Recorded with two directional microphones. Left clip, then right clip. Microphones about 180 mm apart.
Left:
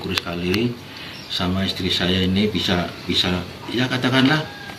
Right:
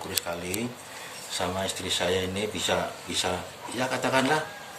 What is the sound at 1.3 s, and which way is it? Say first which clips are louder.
Speech: left 5 dB; 30° right (ahead or behind).